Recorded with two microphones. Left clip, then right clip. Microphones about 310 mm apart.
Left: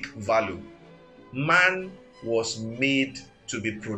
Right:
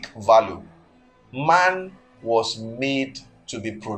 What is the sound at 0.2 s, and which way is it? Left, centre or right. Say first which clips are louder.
Speech: right 9 dB; right.